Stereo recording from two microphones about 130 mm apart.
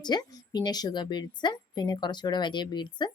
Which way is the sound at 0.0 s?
30° left (ahead or behind).